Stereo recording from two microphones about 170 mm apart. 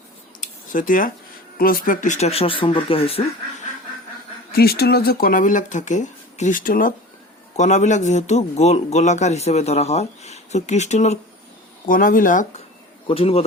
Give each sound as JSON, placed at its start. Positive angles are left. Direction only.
{"t": 0.4, "sound": "a sound", "side_deg": 50}
{"t": 1.5, "sound": "a man's voice", "side_deg": 60}
{"t": 4.5, "sound": "speech", "side_deg": 65}
{"t": 7.5, "sound": "a man's voice", "side_deg": 40}
{"t": 11.9, "sound": "speech", "side_deg": 55}
{"t": 13.1, "sound": "a man's voice", "side_deg": 35}